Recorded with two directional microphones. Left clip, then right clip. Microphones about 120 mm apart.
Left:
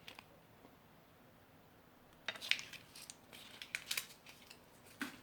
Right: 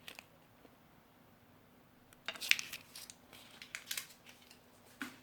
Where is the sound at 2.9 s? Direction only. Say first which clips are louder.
Right 3 dB; 85° right.